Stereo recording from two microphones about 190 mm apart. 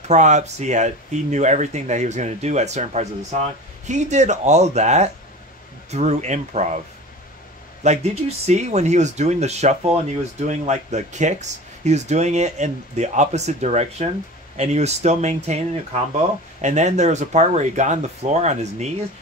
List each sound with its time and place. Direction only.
0.1 s speech: 40° right (ahead or behind)
7.8 s speech: 35° right (ahead or behind)